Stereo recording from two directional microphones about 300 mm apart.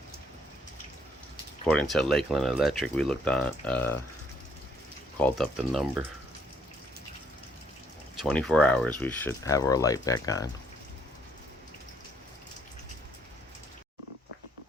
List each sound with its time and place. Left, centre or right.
1.6 s speech: centre
5.2 s speech: centre
8.2 s speech: centre